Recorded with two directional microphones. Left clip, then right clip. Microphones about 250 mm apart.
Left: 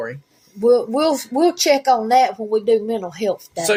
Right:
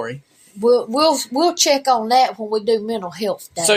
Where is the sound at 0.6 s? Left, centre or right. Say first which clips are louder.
Right 1 dB; centre.